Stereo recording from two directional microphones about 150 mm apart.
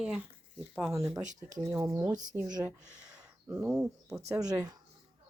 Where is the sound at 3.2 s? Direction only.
20° right (ahead or behind).